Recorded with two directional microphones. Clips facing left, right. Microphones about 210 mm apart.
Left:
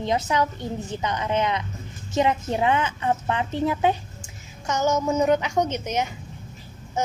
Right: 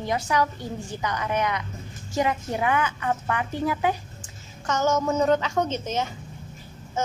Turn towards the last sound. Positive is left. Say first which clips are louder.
# left 2 dB
turn(degrees=15)  # may be behind; listen again after turning